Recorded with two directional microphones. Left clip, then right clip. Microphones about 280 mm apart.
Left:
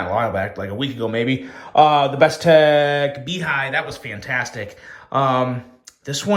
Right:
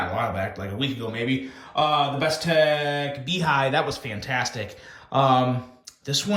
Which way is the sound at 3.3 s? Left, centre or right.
Centre.